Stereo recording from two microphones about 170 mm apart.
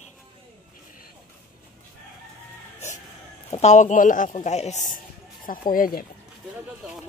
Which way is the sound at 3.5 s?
40° left (ahead or behind).